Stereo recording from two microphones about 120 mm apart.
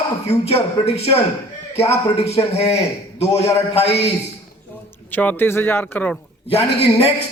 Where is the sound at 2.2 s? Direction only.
60° left (ahead or behind).